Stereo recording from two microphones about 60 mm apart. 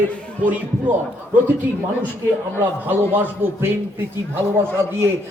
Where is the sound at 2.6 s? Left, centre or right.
Right.